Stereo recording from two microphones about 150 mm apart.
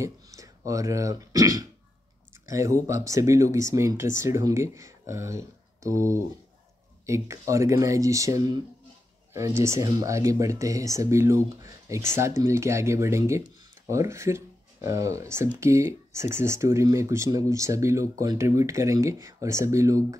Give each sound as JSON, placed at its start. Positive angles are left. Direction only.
{"t": 0.0, "sound": "speech", "side_deg": -20}